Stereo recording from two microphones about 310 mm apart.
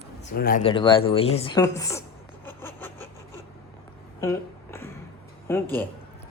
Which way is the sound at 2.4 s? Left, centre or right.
Centre.